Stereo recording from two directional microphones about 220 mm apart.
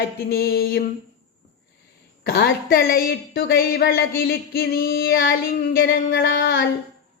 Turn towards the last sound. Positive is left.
turn(degrees=50)  # may be behind; listen again after turning